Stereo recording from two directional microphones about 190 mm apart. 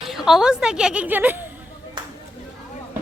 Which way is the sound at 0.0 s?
Centre (ahead or behind).